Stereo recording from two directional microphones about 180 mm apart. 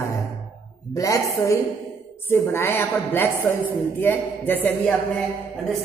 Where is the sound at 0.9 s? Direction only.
20° left (ahead or behind).